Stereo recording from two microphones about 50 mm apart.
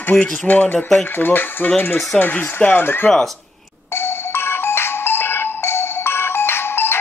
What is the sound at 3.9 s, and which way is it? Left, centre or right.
Music, left.